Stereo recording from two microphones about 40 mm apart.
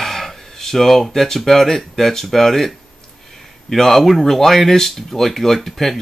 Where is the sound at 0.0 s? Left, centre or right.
Centre.